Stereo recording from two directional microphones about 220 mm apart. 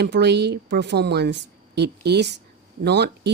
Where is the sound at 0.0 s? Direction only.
50° right (ahead or behind).